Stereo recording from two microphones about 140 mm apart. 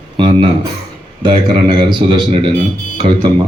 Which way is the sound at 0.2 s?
40° right (ahead or behind).